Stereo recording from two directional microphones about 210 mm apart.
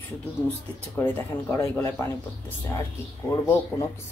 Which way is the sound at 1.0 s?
10° left (ahead or behind).